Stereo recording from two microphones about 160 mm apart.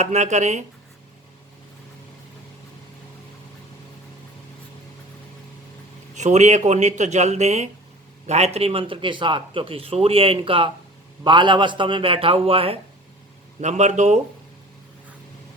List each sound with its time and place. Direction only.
0.0 s speech: 45° right (ahead or behind)
6.1 s a man's voice: 45° right (ahead or behind)
13.6 s speech: 45° right (ahead or behind)